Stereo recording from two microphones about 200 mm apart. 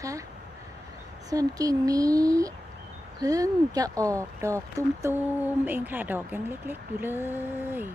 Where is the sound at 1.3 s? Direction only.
15° right (ahead or behind).